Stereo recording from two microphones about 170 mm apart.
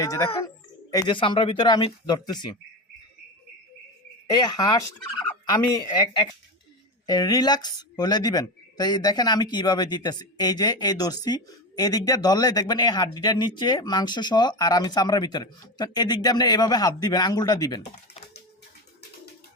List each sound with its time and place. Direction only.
0.0 s speech: 20° left (ahead or behind)
4.3 s speech: 25° left (ahead or behind)